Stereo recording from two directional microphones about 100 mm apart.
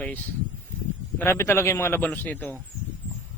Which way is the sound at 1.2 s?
25° left (ahead or behind).